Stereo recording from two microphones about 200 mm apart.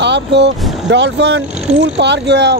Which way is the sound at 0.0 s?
60° right (ahead or behind).